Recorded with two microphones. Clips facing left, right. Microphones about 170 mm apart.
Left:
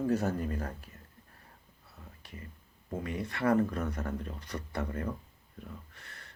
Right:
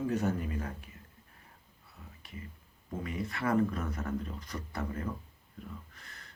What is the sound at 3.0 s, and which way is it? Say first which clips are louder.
Speech: left 3 dB; 30° left (ahead or behind).